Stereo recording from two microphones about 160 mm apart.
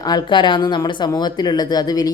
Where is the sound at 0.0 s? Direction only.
25° left (ahead or behind).